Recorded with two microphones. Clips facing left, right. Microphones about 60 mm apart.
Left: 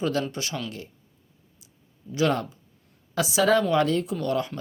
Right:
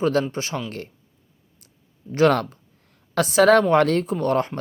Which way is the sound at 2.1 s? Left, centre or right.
Right.